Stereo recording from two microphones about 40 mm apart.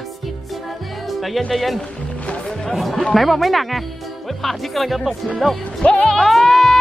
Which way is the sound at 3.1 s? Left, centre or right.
Centre.